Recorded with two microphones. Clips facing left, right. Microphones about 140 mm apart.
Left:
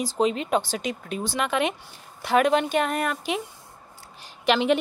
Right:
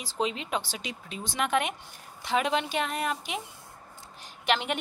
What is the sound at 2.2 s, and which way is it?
Speech, 55° left (ahead or behind).